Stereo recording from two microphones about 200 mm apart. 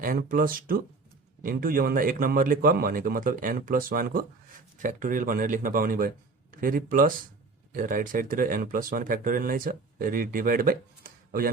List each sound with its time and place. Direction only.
0.0 s a man's voice: 45° right (ahead or behind)